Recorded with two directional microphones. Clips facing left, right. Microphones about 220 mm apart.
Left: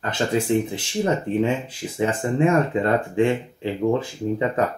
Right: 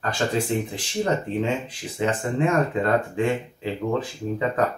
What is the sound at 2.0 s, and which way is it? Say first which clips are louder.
Speech: left 2 dB; 30° left (ahead or behind).